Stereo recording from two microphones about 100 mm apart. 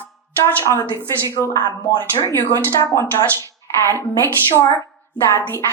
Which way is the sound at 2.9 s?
30° left (ahead or behind).